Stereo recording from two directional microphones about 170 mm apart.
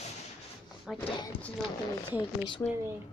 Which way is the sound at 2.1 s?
30° left (ahead or behind).